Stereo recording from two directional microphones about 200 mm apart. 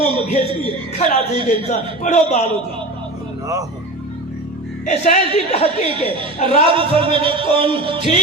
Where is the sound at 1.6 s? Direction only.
35° left (ahead or behind).